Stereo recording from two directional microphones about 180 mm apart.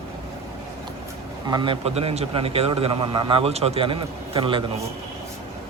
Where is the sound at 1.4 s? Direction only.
25° right (ahead or behind).